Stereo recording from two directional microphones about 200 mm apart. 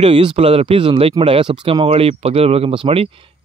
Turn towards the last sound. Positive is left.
turn(degrees=-25)  # may be behind; listen again after turning